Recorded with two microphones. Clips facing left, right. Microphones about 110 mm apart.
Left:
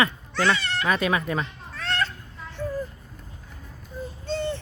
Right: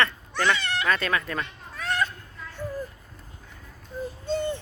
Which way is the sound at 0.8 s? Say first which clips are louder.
Left 4 dB; 15° left (ahead or behind).